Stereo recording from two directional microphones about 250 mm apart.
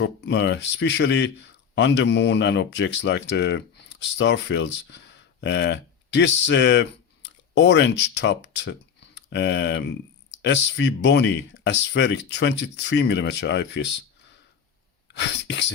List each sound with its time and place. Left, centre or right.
0.0 s speech: left
15.1 s speech: left